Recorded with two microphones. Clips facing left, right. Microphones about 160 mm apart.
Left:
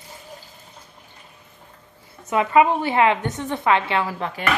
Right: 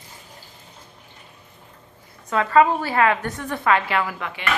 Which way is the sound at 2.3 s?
15° left (ahead or behind).